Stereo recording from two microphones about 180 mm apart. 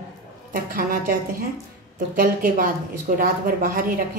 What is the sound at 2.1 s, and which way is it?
A woman's voice, 50° right (ahead or behind).